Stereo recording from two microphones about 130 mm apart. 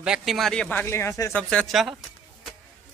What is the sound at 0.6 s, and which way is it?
Speech, 15° left (ahead or behind).